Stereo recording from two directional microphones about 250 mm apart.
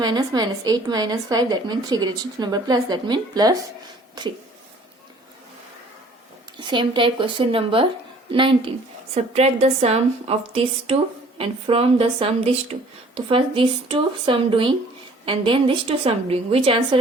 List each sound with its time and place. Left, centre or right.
0.0 s a woman's voice: centre
6.6 s a woman's voice: centre